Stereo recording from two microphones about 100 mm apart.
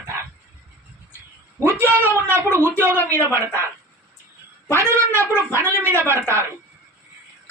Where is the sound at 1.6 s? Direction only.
25° right (ahead or behind).